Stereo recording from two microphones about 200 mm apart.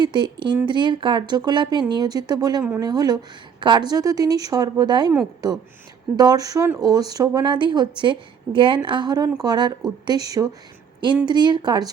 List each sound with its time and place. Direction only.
0.0 s speech: 20° right (ahead or behind)
6.1 s speech: 20° right (ahead or behind)
11.3 s speech: 20° right (ahead or behind)